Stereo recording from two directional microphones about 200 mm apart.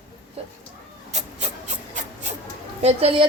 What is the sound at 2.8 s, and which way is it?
Speech, 30° right (ahead or behind).